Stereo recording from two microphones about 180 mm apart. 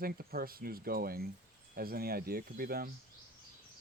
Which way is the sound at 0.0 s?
55° right (ahead or behind).